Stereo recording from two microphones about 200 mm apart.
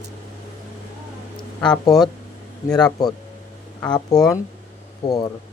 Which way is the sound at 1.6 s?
20° left (ahead or behind).